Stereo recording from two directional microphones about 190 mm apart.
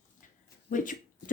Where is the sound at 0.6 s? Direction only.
45° left (ahead or behind).